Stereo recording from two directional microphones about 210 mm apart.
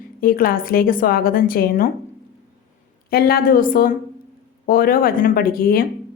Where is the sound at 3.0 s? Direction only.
45° left (ahead or behind).